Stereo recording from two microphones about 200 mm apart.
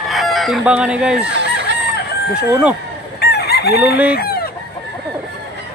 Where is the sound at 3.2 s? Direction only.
55° left (ahead or behind).